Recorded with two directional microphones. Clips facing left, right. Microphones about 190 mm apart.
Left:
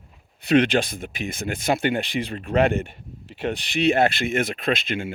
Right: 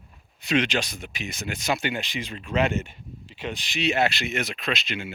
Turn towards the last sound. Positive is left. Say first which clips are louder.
# left 5 dB
turn(degrees=50)  # may be behind; listen again after turning